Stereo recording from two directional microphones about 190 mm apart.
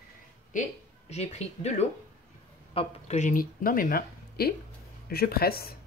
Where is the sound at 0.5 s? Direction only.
40° left (ahead or behind).